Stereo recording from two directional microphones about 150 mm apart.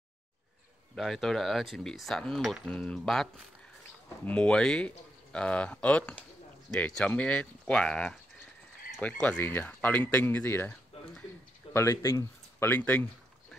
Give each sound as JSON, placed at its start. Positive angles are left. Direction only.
{"t": 0.9, "sound": "speech", "side_deg": 0}
{"t": 4.3, "sound": "speech", "side_deg": 5}
{"t": 10.9, "sound": "a sound", "side_deg": 40}
{"t": 11.7, "sound": "speech", "side_deg": 20}